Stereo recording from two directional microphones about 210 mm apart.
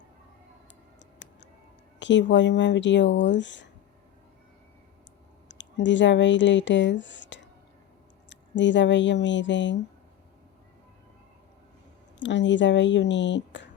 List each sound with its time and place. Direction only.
2.0 s speech: 60° left (ahead or behind)
5.5 s speech: 60° left (ahead or behind)
12.2 s speech: 60° left (ahead or behind)